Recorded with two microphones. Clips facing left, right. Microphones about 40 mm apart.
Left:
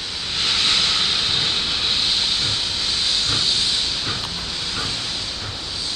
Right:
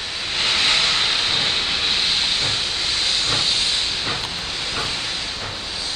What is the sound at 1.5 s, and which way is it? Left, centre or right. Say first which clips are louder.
Hiss: right 1 dB; right.